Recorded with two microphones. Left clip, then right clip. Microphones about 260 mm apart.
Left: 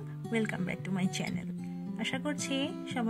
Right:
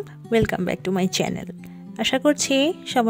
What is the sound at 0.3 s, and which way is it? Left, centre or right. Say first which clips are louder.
A woman's voice: right 13 dB; right.